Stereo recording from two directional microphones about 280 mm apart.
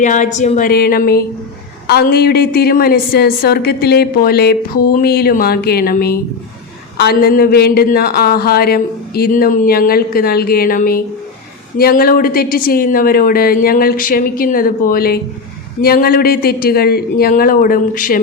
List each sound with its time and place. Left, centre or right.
0.0 s speech: left